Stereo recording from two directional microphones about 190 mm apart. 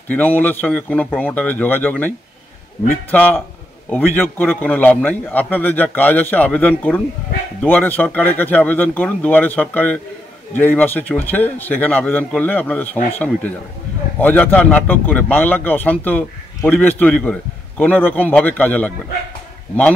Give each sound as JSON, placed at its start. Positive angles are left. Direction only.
{"t": 0.1, "sound": "a man's voice", "side_deg": 10}
{"t": 14.2, "sound": "a man's voice", "side_deg": 10}